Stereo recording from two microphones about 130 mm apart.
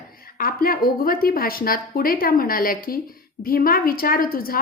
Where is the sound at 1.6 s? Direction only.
90° left.